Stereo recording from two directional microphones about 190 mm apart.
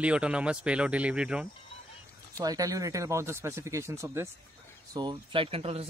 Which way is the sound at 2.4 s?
20° right (ahead or behind).